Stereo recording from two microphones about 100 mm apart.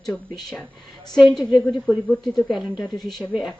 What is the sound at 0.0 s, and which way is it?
Speech, 5° left (ahead or behind).